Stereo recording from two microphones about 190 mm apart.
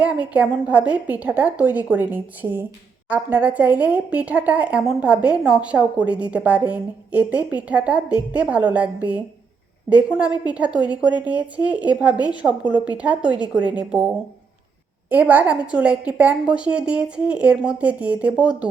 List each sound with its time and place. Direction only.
0.0 s speech: 5° right (ahead or behind)
15.1 s speech: 10° right (ahead or behind)